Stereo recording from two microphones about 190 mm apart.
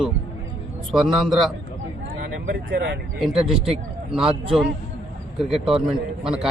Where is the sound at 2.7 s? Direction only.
65° right (ahead or behind).